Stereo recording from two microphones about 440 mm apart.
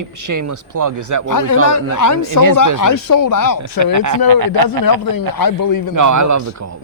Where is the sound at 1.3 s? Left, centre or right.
Left.